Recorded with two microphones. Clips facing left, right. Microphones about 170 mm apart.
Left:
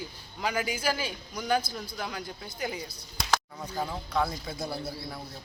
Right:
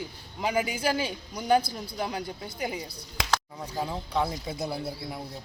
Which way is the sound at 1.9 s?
30° right (ahead or behind).